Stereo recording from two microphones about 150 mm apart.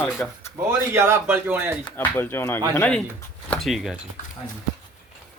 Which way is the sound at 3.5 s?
Centre (ahead or behind).